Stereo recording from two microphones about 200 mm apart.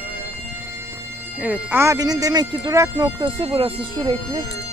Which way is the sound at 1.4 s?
10° right (ahead or behind).